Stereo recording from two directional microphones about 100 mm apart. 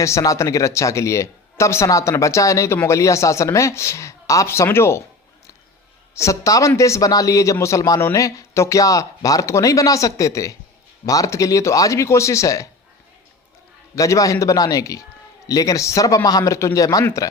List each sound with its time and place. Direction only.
0.0 s a man's voice: 30° left (ahead or behind)
6.1 s a man's voice: 30° left (ahead or behind)
13.9 s a man's voice: 35° left (ahead or behind)